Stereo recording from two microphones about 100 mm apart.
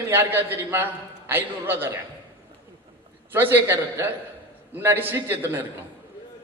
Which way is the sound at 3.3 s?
20° right (ahead or behind).